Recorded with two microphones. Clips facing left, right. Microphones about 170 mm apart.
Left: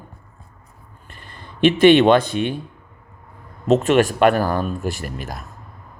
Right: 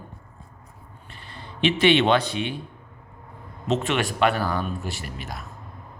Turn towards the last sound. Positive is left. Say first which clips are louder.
# left 5 dB
turn(degrees=45)  # may be behind; listen again after turning